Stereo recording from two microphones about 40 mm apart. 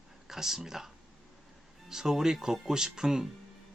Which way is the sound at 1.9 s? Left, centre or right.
Centre.